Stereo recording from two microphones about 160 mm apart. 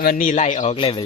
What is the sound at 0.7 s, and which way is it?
Speech, 30° left (ahead or behind).